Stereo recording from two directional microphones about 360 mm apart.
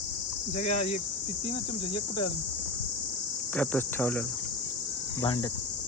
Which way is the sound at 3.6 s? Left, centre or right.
Centre.